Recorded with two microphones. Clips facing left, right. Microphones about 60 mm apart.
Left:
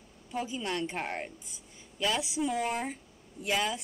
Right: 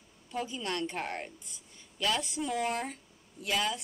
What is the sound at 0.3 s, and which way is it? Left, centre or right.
Speech, centre.